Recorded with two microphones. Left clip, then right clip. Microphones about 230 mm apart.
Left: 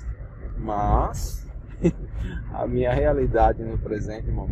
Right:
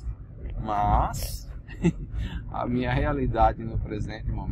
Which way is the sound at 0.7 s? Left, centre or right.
Right.